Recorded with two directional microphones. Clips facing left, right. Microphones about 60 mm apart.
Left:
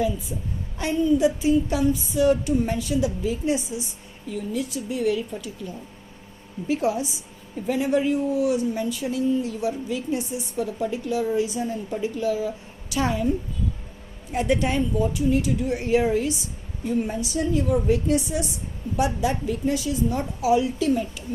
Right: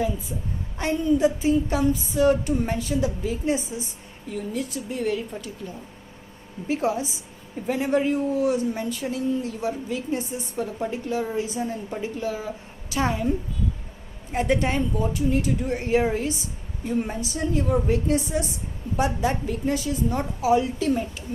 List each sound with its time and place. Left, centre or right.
0.8 s speech: right
6.7 s speech: right
14.3 s speech: right